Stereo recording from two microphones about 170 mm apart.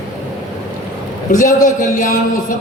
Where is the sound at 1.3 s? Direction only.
50° left (ahead or behind).